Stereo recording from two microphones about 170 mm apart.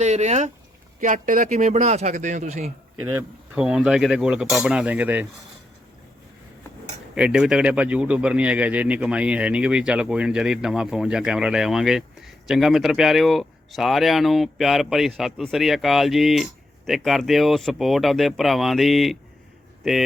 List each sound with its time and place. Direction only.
0.0 s a man's voice: 40° right (ahead or behind)
3.0 s speech: 10° right (ahead or behind)
7.2 s speech: 5° right (ahead or behind)